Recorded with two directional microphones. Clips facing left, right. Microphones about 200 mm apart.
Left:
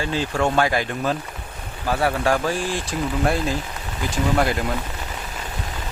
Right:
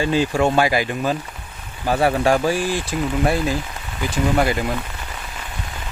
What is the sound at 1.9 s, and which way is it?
Speech, 15° right (ahead or behind).